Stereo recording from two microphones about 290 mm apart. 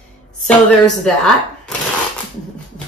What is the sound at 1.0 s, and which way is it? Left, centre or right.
Speech, centre.